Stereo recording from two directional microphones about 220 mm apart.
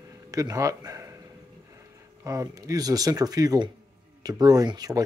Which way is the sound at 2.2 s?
15° right (ahead or behind).